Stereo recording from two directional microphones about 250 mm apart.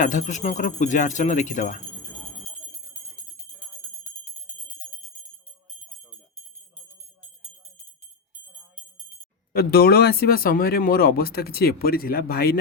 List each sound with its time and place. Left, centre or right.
0.0 s speech: left
9.5 s speech: left